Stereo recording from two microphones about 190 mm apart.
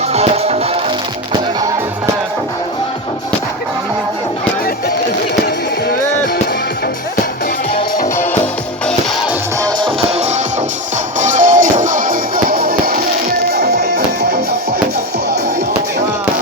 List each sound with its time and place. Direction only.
0.1 s music: 35° right (ahead or behind)
8.0 s music: 15° left (ahead or behind)
9.6 s music: 25° right (ahead or behind); by 14.3 s 60° right (ahead or behind)